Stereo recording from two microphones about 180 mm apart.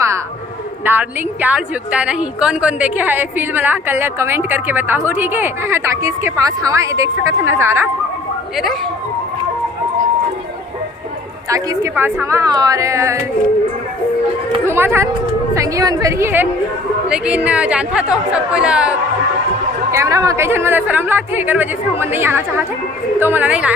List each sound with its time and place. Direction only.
0.9 s a woman's voice: 10° right (ahead or behind)
8.5 s a woman's voice: centre (ahead or behind)
11.4 s a woman's voice: 20° right (ahead or behind)
14.7 s a woman's voice: 15° right (ahead or behind)
19.9 s a woman's voice: 15° right (ahead or behind)